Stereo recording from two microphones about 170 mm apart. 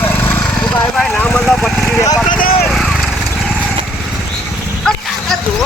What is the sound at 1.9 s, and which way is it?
Speech, 20° left (ahead or behind).